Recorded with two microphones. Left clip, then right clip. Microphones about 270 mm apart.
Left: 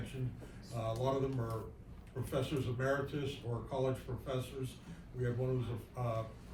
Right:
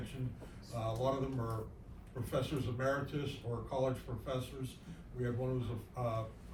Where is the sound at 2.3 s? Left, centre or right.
Right.